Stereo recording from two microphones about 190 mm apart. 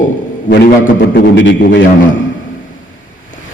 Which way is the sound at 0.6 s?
60° left (ahead or behind).